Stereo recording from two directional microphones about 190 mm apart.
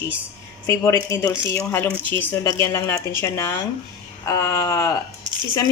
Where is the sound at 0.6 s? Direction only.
15° left (ahead or behind).